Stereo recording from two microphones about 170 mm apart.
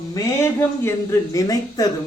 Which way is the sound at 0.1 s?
15° left (ahead or behind).